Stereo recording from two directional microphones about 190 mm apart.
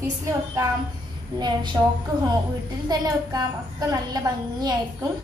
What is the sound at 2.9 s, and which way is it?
A woman's voice, 20° right (ahead or behind).